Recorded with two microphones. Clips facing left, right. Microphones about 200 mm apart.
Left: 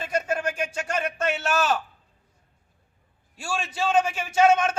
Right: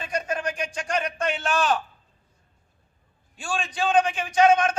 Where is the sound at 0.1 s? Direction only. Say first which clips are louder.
Left 1 dB; 5° left (ahead or behind).